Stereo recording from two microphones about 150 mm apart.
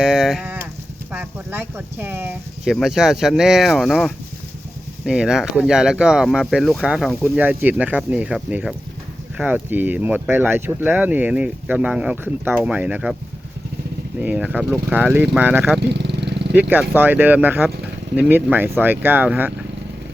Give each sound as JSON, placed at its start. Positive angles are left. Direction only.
{"t": 0.0, "sound": "livestock", "side_deg": -5}
{"t": 1.1, "sound": "speech", "side_deg": -15}
{"t": 2.6, "sound": "speech", "side_deg": 0}
{"t": 14.2, "sound": "speech", "side_deg": -10}
{"t": 15.8, "sound": "vehicle", "side_deg": -90}
{"t": 16.6, "sound": "speech", "side_deg": -10}